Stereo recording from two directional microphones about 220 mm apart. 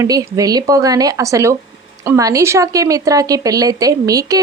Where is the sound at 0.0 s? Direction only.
15° right (ahead or behind).